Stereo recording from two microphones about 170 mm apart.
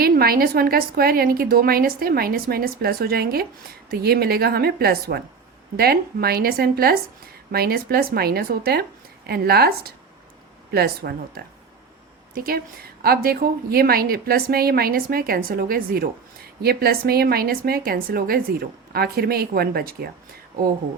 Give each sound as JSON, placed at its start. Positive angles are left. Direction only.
{"t": 0.0, "sound": "a woman's voice", "side_deg": -60}